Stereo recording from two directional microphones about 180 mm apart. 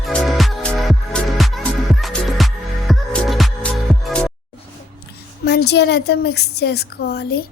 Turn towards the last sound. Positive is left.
turn(degrees=65)  # may be behind; listen again after turning